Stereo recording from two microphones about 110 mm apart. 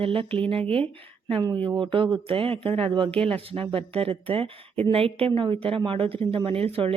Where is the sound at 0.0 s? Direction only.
55° right (ahead or behind).